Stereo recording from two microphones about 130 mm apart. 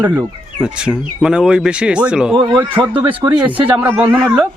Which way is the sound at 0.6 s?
5° right (ahead or behind).